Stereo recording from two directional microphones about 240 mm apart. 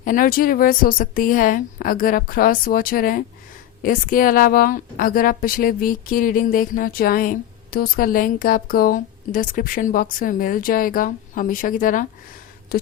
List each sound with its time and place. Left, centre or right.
0.0 s speech: left